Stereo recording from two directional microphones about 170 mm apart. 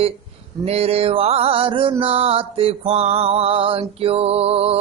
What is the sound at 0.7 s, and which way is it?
Mantra, 35° right (ahead or behind).